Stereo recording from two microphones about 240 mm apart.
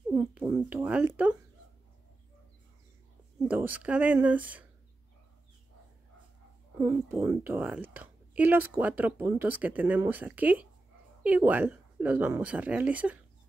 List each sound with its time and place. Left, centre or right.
0.1 s a woman's voice: centre
3.4 s a woman's voice: centre
6.8 s a woman's voice: centre